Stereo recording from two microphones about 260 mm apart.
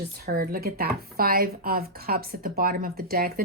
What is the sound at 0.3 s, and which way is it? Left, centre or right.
Speech, right.